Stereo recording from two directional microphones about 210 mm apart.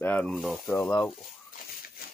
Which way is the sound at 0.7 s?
10° left (ahead or behind).